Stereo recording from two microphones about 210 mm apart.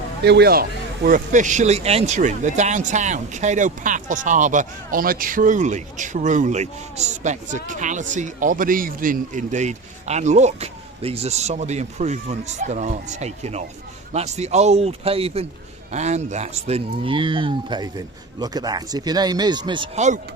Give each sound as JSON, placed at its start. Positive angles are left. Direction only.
{"t": 0.3, "sound": "speech", "side_deg": -50}
{"t": 1.0, "sound": "speech", "side_deg": -40}